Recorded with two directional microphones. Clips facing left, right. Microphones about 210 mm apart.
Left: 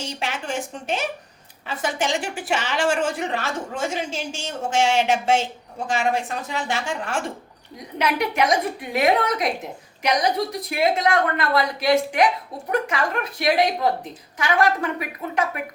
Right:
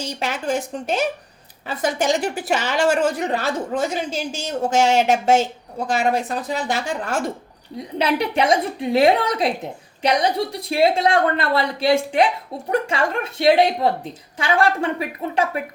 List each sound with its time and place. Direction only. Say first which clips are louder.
0.2 s a woman's voice: right 6 dB; 40° right (ahead or behind)